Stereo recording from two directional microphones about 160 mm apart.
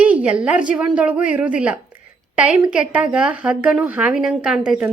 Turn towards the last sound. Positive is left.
turn(degrees=-5)  # may be behind; listen again after turning